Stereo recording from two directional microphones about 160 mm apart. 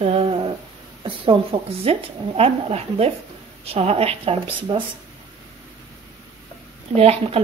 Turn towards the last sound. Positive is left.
turn(degrees=-40)  # may be behind; listen again after turning